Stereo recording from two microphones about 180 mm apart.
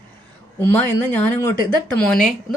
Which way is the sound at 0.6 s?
10° left (ahead or behind).